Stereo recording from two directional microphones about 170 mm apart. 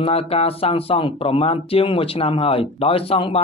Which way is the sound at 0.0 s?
35° left (ahead or behind).